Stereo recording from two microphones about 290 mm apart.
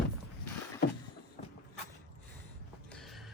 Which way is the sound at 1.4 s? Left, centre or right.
Left.